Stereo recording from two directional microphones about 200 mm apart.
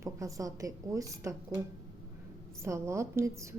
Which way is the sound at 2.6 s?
15° right (ahead or behind).